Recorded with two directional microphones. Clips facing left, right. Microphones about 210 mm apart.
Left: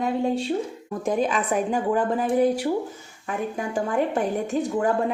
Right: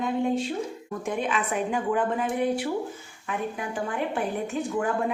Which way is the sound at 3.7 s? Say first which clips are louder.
Left 7 dB; 40° left (ahead or behind).